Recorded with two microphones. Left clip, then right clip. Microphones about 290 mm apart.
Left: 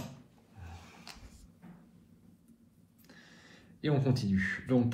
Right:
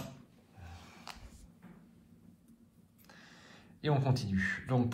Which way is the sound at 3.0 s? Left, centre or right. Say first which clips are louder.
Even; right.